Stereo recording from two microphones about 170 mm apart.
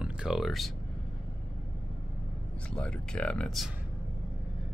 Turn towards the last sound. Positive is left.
turn(degrees=0)  # may be behind; listen again after turning